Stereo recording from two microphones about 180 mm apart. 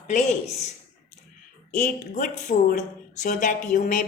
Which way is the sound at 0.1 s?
40° left (ahead or behind).